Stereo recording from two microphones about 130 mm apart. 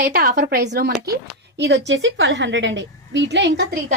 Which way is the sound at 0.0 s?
90° right.